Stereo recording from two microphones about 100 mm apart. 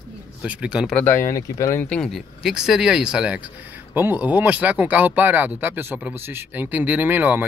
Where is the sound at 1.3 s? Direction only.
30° left (ahead or behind).